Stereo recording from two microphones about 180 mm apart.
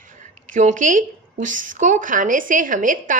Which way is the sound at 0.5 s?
45° right (ahead or behind).